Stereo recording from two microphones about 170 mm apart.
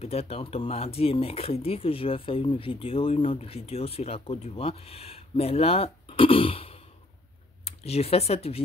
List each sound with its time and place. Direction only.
0.0 s speech: 35° left (ahead or behind)